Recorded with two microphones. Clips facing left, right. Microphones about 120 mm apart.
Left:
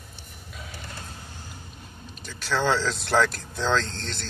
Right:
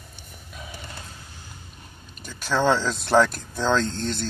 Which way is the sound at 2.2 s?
15° right (ahead or behind).